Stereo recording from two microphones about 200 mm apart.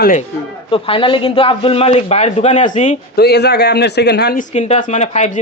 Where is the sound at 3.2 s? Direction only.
55° left (ahead or behind).